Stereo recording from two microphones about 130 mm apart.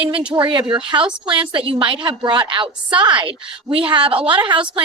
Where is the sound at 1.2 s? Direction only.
40° right (ahead or behind).